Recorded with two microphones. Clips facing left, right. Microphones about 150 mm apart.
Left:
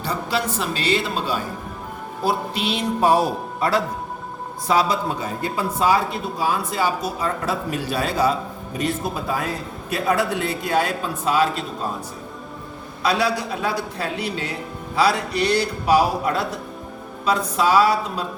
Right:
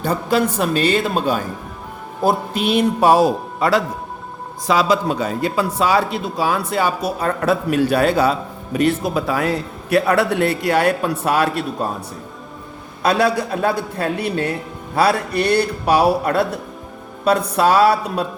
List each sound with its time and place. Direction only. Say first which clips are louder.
0.0 s speech: right 6 dB; 50° right (ahead or behind)
3.0 s speech: right 3 dB; 90° right; by 11.9 s 65° right (ahead or behind)
13.0 s a man's voice: right 4 dB; 55° right (ahead or behind)